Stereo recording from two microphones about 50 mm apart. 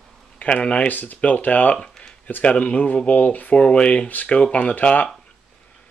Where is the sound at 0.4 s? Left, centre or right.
Left.